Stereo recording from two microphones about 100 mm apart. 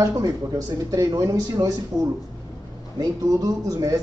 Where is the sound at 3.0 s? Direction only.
40° right (ahead or behind).